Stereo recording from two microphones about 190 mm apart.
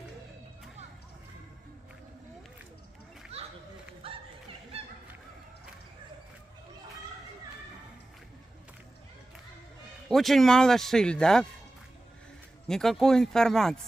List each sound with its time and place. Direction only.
3.3 s a sound: 35° right (ahead or behind)
10.0 s speech: centre (ahead or behind)
12.6 s speech: centre (ahead or behind)